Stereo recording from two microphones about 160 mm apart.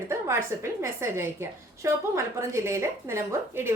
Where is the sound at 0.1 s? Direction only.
15° right (ahead or behind).